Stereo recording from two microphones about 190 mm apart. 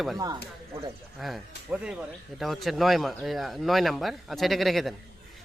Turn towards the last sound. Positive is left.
turn(degrees=0)  # may be behind; listen again after turning